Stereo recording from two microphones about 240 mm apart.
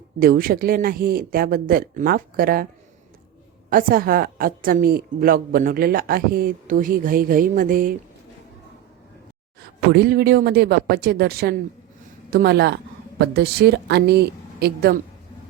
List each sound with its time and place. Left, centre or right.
0.2 s a woman's voice: right
3.7 s a woman's voice: right
9.6 s a woman's voice: right